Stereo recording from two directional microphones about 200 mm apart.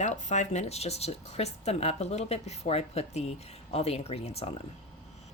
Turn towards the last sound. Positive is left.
turn(degrees=30)  # may be behind; listen again after turning